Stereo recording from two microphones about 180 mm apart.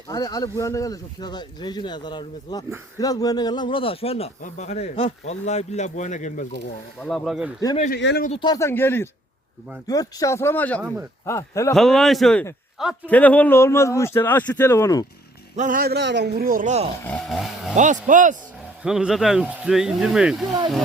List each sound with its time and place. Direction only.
0.1 s speech: 20° left (ahead or behind); by 6.6 s 45° left (ahead or behind)
7.0 s speech: centre (ahead or behind)
7.9 s speech: 70° left (ahead or behind)
8.4 s speech: 20° left (ahead or behind)
10.8 s speech: 15° right (ahead or behind)
11.3 s speech: 15° left (ahead or behind)
11.7 s speech: centre (ahead or behind); by 15.0 s 15° left (ahead or behind)
15.5 s speech: 45° right (ahead or behind); by 16.3 s 70° right (ahead or behind)
16.4 s speech: 50° right (ahead or behind)
17.0 s speech: 5° left (ahead or behind)
17.7 s speech: 45° right (ahead or behind)
18.8 s speech: 5° right (ahead or behind)